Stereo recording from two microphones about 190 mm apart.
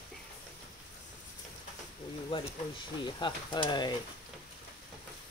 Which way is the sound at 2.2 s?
25° left (ahead or behind).